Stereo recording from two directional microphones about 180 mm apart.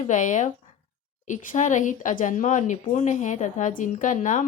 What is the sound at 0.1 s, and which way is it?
Speech, 45° left (ahead or behind).